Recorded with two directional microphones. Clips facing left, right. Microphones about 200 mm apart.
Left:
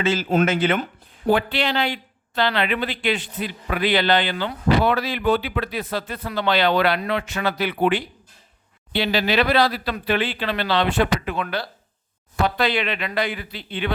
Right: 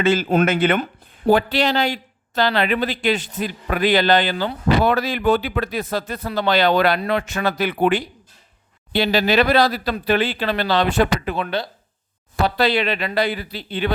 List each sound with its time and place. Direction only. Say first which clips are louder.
0.0 s speech: right 3 dB; 55° right (ahead or behind)
1.3 s speech: right 3 dB; 40° right (ahead or behind)
11.4 s speech: right 3 dB; 25° right (ahead or behind)
12.4 s speech: right 3 dB; 35° right (ahead or behind)